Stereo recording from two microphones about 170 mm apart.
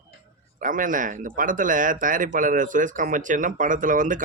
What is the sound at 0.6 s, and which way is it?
Speech, 50° right (ahead or behind).